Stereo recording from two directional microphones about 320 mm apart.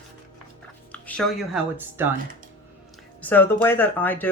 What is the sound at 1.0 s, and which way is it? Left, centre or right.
Speech, centre.